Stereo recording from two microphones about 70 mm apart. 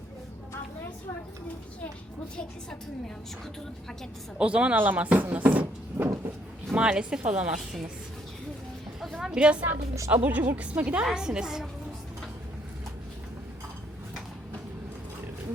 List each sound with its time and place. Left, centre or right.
4.4 s a woman's voice: centre
6.7 s a woman's voice: centre
9.0 s a woman's voice: centre